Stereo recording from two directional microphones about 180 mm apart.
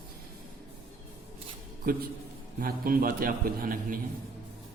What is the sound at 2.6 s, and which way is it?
A man's voice, 50° right (ahead or behind).